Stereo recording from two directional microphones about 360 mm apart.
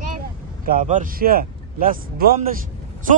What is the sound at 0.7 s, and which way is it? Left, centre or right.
A man's voice, right.